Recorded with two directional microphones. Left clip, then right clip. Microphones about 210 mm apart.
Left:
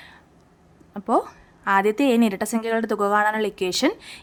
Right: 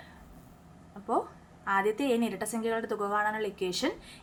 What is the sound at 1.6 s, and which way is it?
A woman's voice, 50° left (ahead or behind).